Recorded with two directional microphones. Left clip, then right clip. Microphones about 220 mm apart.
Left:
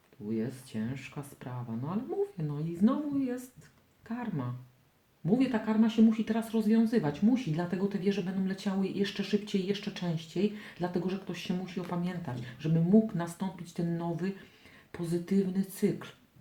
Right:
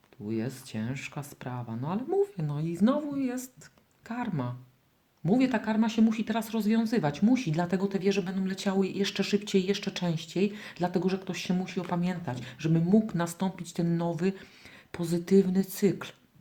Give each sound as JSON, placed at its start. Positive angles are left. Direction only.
{"t": 0.3, "sound": "speech", "side_deg": -45}